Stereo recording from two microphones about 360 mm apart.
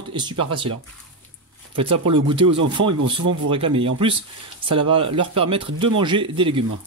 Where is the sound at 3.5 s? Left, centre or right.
Centre.